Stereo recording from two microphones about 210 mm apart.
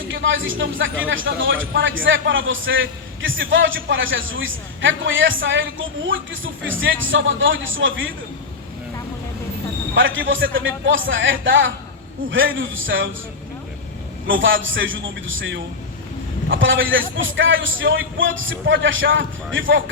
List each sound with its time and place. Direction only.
0.1 s a man's voice: 65° right (ahead or behind)
9.9 s a man's voice: 65° right (ahead or behind)
14.3 s a man's voice: 65° right (ahead or behind)